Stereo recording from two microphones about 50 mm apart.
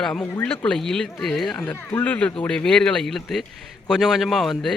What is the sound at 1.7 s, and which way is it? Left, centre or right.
Speech, left.